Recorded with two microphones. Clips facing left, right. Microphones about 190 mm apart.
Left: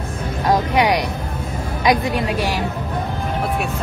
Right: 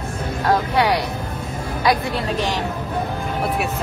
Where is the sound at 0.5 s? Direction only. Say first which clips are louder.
Left 1 dB; 15° left (ahead or behind).